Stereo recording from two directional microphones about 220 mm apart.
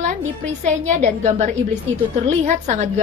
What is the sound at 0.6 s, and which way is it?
A woman's voice, 35° right (ahead or behind).